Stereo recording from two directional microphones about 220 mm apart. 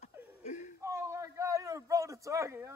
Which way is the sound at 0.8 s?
10° right (ahead or behind).